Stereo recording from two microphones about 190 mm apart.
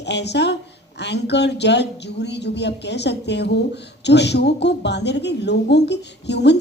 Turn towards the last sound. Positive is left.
turn(degrees=65)  # may be behind; listen again after turning